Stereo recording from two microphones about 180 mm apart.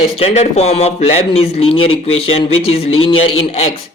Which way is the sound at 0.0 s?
35° left (ahead or behind).